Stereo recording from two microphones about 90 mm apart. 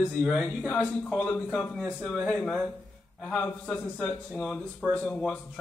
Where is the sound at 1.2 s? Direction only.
20° left (ahead or behind).